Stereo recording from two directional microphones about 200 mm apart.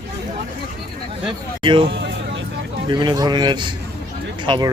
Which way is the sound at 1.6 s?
25° right (ahead or behind).